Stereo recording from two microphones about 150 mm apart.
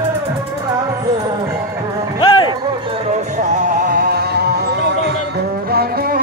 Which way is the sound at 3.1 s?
55° right (ahead or behind).